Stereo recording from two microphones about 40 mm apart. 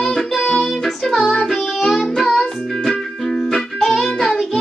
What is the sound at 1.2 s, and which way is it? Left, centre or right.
Child singing, centre.